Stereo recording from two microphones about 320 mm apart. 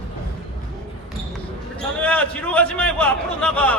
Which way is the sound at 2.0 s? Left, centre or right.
Centre.